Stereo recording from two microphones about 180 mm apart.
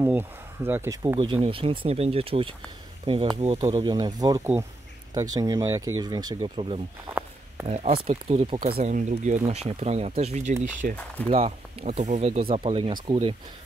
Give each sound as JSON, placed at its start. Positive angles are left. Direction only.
{"t": 0.0, "sound": "a sound", "side_deg": -10}
{"t": 1.0, "sound": "speech", "side_deg": -25}
{"t": 3.7, "sound": "speech", "side_deg": -20}